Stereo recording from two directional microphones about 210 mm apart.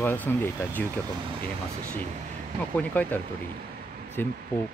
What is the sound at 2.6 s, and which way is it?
Speech, 5° left (ahead or behind).